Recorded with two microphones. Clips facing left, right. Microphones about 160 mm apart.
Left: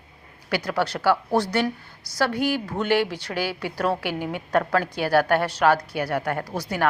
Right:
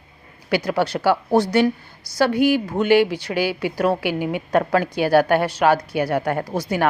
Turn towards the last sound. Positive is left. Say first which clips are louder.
# right 4 dB
turn(degrees=-20)  # may be behind; listen again after turning